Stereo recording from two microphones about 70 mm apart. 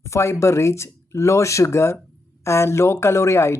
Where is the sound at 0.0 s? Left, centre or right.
Left.